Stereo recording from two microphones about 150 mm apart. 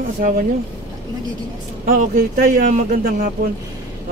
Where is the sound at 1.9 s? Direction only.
75° right (ahead or behind).